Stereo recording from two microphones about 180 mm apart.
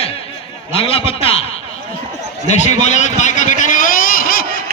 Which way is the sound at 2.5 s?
40° left (ahead or behind).